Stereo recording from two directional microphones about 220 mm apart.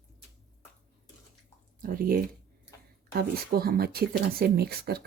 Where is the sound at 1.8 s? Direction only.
40° right (ahead or behind).